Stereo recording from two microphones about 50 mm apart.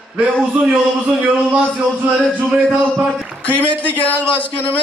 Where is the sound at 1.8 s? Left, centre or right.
Right.